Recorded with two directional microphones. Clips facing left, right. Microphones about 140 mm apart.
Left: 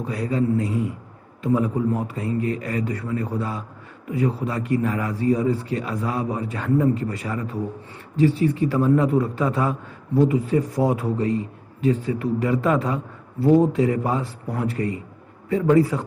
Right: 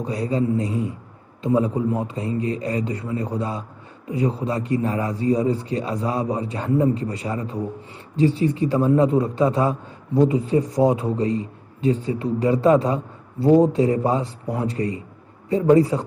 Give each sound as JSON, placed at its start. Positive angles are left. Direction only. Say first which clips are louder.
{"t": 0.0, "sound": "a man's voice", "louder": "right 1 dB", "side_deg": -25}